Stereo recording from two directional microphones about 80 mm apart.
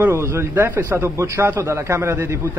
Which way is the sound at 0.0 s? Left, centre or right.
Right.